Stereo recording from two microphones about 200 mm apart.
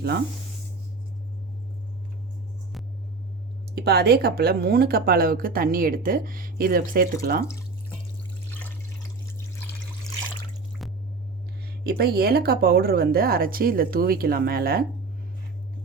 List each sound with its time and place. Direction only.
3.8 s speech: 55° right (ahead or behind)
10.8 s squish: centre (ahead or behind)
11.6 s speech: 50° right (ahead or behind)